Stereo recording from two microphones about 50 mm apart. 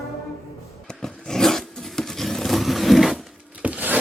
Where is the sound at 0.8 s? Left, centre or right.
Centre.